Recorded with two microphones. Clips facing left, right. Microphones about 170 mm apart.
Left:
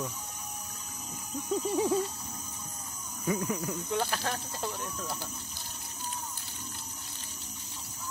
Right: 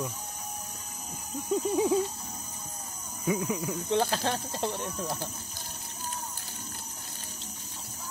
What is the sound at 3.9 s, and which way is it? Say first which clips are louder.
Speech: right 6 dB; 25° right (ahead or behind).